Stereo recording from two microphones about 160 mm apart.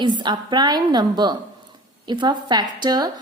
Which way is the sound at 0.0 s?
30° right (ahead or behind).